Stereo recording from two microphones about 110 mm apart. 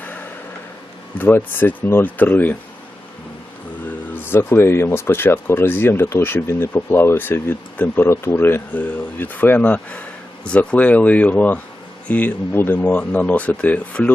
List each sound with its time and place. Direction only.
1.2 s speech: 20° left (ahead or behind)
4.1 s speech: 20° left (ahead or behind)